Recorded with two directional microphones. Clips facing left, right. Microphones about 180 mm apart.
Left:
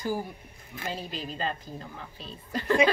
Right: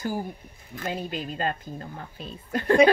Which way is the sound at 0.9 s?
55° right (ahead or behind).